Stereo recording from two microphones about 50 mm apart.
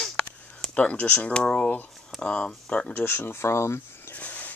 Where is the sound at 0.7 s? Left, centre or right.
Left.